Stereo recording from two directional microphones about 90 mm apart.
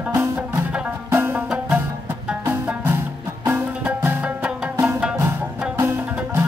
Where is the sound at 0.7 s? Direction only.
15° right (ahead or behind).